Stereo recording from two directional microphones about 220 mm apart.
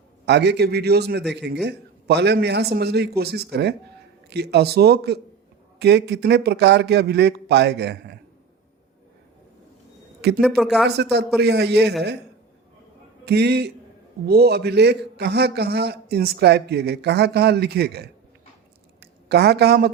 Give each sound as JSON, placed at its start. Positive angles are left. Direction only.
{"t": 0.3, "sound": "a man's voice", "side_deg": -50}
{"t": 10.2, "sound": "speech", "side_deg": -50}
{"t": 10.4, "sound": "speech", "side_deg": 0}
{"t": 10.8, "sound": "a man's voice", "side_deg": -50}
{"t": 13.2, "sound": "a man's voice", "side_deg": -50}
{"t": 19.3, "sound": "a man's voice", "side_deg": -50}